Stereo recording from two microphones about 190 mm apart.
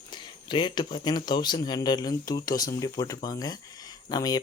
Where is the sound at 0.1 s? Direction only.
25° left (ahead or behind).